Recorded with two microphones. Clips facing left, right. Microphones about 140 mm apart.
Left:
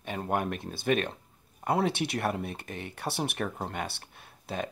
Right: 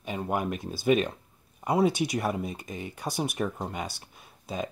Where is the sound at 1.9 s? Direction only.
60° left (ahead or behind).